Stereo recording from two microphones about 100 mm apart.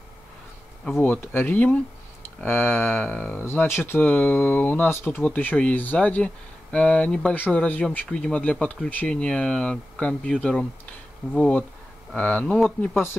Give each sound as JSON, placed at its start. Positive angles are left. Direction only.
{"t": 1.0, "sound": "speech", "side_deg": 20}